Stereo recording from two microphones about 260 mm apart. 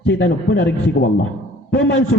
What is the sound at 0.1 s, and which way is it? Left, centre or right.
Speech, left.